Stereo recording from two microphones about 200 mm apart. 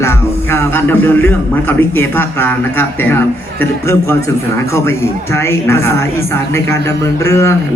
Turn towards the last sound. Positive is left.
turn(degrees=15)  # may be behind; listen again after turning